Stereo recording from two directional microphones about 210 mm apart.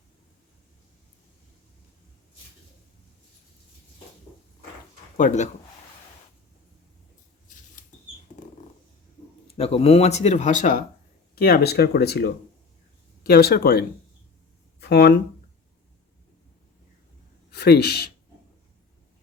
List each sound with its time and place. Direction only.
5.1 s speech: 35° left (ahead or behind)
8.4 s a sound: 35° left (ahead or behind)
9.6 s speech: 30° left (ahead or behind); by 15.1 s 50° left (ahead or behind)
17.5 s speech: 50° left (ahead or behind)